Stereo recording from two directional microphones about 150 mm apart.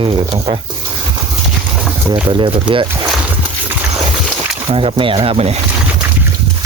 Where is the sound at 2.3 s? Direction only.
30° right (ahead or behind).